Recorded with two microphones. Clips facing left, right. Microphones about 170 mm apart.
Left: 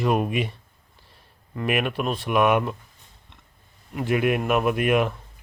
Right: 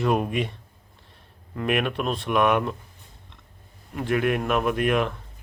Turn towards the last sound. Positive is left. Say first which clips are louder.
# left 2 dB
turn(degrees=10)  # may be behind; listen again after turning